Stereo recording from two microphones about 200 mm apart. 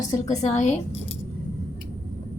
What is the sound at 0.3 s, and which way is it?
Speech, 35° left (ahead or behind).